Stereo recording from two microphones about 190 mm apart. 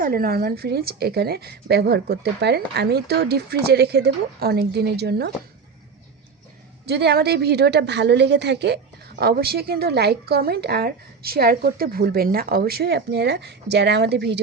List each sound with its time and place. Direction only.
0.0 s speech: 50° right (ahead or behind)
6.8 s speech: 60° right (ahead or behind)